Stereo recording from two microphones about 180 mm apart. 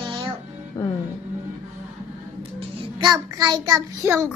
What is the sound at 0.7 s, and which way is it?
Music, 15° left (ahead or behind).